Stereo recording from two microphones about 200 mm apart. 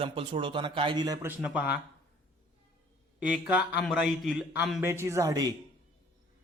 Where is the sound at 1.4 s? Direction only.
5° right (ahead or behind).